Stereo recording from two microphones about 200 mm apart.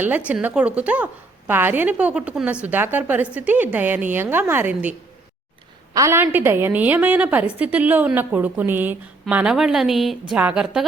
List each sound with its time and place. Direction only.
0.3 s a woman's voice: 5° right (ahead or behind)
5.9 s a woman's voice: 15° right (ahead or behind)